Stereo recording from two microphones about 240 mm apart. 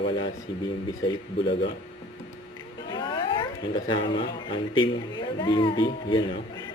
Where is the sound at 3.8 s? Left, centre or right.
Centre.